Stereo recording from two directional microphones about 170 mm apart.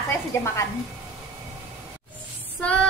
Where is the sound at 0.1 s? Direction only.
15° left (ahead or behind).